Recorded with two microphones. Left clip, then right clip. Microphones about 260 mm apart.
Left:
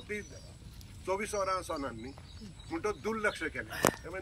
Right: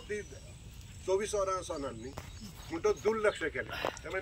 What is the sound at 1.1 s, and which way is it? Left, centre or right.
Speech, centre.